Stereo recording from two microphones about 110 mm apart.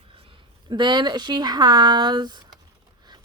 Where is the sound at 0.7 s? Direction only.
40° right (ahead or behind).